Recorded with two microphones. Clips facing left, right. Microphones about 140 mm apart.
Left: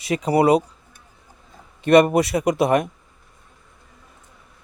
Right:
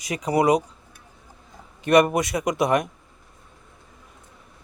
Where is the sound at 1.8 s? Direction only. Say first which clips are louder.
Left 4 dB; 25° left (ahead or behind).